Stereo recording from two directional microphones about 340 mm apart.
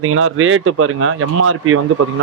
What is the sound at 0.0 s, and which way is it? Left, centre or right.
Speech, right.